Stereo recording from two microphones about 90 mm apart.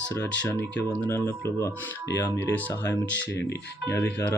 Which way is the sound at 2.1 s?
25° left (ahead or behind).